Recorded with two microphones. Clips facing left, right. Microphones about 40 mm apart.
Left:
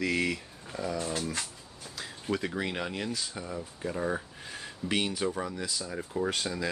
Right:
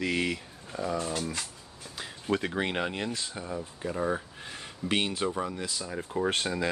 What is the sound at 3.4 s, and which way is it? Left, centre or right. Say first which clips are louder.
Speech: right 1 dB; centre.